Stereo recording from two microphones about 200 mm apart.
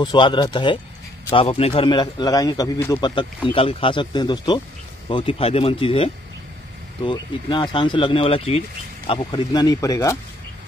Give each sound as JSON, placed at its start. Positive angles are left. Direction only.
{"t": 0.0, "sound": "speech", "side_deg": 25}
{"t": 7.1, "sound": "speech", "side_deg": 25}